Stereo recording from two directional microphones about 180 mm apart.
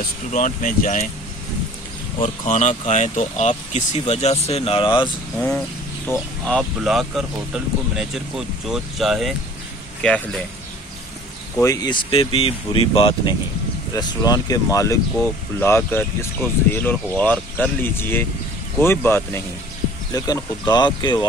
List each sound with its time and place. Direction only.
0.3 s speech: 45° left (ahead or behind)
2.1 s speech: 40° left (ahead or behind)
6.0 s speech: 5° left (ahead or behind)
11.5 s speech: 20° left (ahead or behind)